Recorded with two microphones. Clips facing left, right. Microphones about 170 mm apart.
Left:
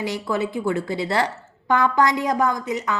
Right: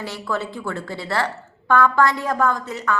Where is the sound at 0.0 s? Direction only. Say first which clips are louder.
Left 3 dB; 15° left (ahead or behind).